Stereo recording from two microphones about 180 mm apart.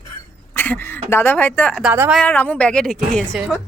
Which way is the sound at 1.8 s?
10° right (ahead or behind).